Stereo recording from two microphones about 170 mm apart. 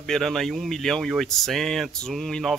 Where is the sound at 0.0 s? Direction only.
Centre (ahead or behind).